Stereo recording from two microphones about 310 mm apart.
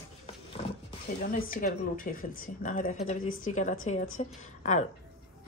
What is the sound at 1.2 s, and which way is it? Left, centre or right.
Speech, left.